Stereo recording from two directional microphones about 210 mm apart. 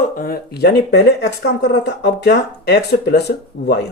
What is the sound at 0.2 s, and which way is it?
Speech, 45° left (ahead or behind).